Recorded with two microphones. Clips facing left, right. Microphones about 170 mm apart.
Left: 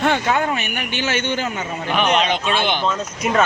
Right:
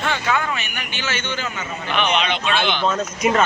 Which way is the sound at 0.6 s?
55° left (ahead or behind).